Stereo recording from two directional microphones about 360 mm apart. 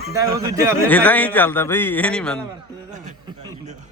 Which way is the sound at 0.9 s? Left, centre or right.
Centre.